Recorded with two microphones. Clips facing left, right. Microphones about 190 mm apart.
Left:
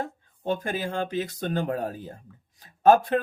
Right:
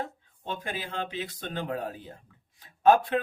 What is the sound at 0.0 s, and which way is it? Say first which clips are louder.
Speech: left 5 dB; 45° left (ahead or behind).